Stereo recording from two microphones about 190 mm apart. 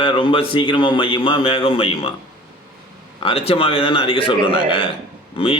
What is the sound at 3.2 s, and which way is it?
A man's voice, 30° left (ahead or behind).